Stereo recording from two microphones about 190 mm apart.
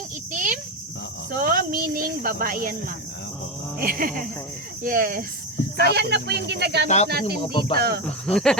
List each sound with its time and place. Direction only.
0.3 s cricket: 45° right (ahead or behind)
1.3 s a sound: 50° right (ahead or behind)
3.8 s speech: 50° right (ahead or behind)
5.9 s speech: 60° right (ahead or behind)
6.8 s speech: 35° left (ahead or behind)
7.1 s speech: 55° right (ahead or behind)
7.4 s speech: 25° left (ahead or behind)
7.8 s speech: 55° right (ahead or behind)
8.0 s speech: centre (ahead or behind)